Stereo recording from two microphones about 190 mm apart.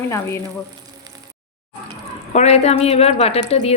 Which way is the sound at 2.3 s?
35° left (ahead or behind).